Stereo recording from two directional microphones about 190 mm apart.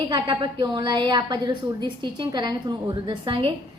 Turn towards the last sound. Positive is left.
turn(degrees=-25)  # may be behind; listen again after turning